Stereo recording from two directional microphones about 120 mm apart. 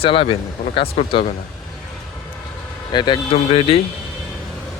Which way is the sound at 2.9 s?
40° left (ahead or behind).